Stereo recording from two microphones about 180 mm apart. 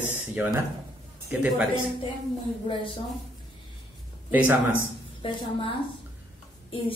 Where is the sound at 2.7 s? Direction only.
30° left (ahead or behind).